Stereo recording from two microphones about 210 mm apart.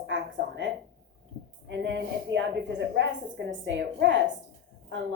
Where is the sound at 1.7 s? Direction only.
60° right (ahead or behind).